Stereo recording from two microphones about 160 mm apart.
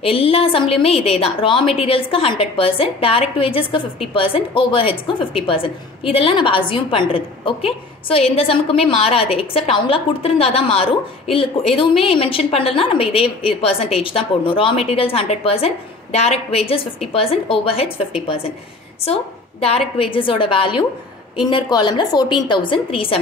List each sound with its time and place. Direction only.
0.0 s a woman's voice: 35° left (ahead or behind)
20.0 s a woman's voice: 35° left (ahead or behind)